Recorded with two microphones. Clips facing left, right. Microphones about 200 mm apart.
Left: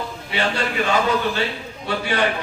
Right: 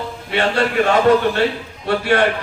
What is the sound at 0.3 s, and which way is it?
A man's voice, 65° right (ahead or behind).